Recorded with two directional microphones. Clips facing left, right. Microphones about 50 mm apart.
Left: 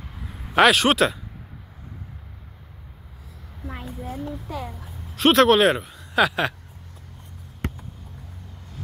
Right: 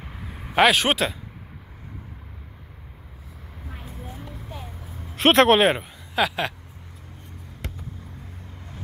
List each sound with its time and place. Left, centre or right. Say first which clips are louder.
0.6 s speech: left 2 dB; centre
5.1 s speech: even; right
5.6 s speech: left 1 dB; centre
6.1 s speech: left 3 dB; centre